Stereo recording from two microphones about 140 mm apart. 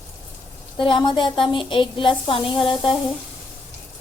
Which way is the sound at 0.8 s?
35° left (ahead or behind).